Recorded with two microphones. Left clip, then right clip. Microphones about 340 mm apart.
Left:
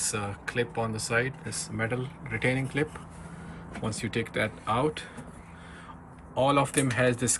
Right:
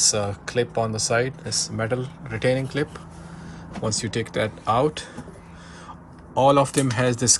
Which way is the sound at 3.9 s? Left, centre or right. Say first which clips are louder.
Right 6 dB; centre.